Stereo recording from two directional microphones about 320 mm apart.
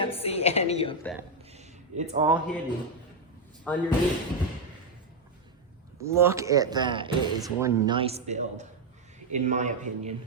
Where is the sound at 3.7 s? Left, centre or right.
Centre.